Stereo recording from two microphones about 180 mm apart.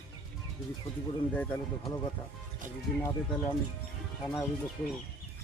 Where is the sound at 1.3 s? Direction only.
10° left (ahead or behind).